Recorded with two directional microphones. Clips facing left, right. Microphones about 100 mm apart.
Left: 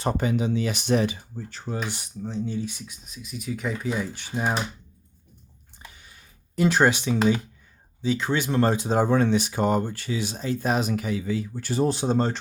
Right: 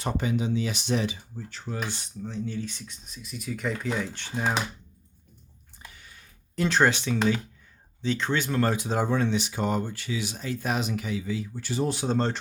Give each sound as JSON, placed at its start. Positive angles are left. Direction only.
{"t": 0.0, "sound": "speech", "side_deg": 50}
{"t": 1.7, "sound": "speech", "side_deg": 15}
{"t": 6.6, "sound": "speech", "side_deg": 15}
{"t": 8.0, "sound": "speech", "side_deg": 10}
{"t": 9.0, "sound": "speech", "side_deg": 50}
{"t": 12.0, "sound": "speech", "side_deg": 15}